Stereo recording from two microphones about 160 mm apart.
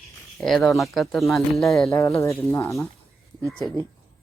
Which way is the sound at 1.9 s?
20° left (ahead or behind).